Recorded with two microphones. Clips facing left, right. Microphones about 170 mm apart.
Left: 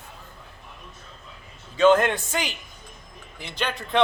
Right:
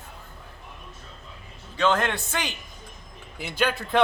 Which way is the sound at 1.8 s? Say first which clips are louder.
Left 6 dB; 15° left (ahead or behind).